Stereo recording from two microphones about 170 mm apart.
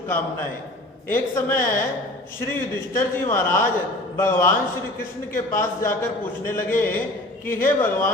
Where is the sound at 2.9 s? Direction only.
15° left (ahead or behind).